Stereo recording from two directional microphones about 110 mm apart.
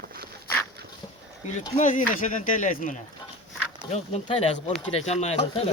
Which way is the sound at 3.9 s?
80° left.